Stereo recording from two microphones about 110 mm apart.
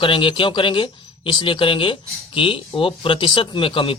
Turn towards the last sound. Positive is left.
turn(degrees=50)  # may be behind; listen again after turning